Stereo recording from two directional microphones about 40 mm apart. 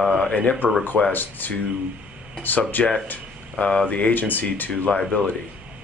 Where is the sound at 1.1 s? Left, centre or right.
Left.